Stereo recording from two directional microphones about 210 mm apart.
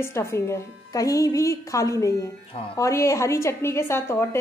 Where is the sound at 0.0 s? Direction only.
10° left (ahead or behind).